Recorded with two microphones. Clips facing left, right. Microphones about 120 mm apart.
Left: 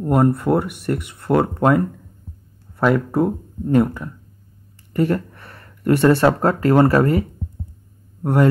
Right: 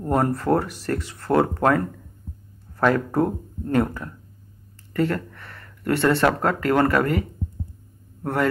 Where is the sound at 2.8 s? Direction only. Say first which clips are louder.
Left 2 dB; 5° left (ahead or behind).